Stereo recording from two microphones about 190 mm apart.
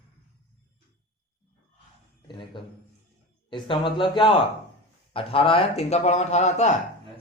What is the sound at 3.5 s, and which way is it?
A man's voice, 25° left (ahead or behind).